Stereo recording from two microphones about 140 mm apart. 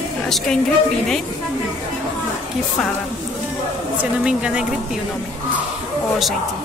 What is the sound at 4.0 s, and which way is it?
Speech, 5° right (ahead or behind).